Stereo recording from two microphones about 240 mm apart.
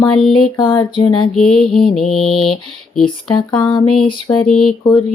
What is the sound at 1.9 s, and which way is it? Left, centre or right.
Music, centre.